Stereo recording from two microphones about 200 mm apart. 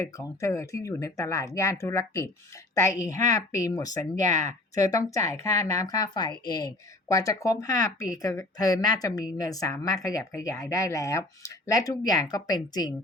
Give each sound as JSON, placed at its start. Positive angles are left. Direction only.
{"t": 0.0, "sound": "speech", "side_deg": 15}
{"t": 4.3, "sound": "speech", "side_deg": -40}
{"t": 4.7, "sound": "speech", "side_deg": 15}